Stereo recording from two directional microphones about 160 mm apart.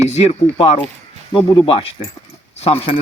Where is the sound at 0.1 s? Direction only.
45° left (ahead or behind).